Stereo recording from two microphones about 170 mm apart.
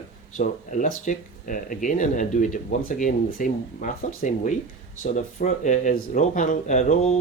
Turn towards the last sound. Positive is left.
turn(degrees=45)  # may be behind; listen again after turning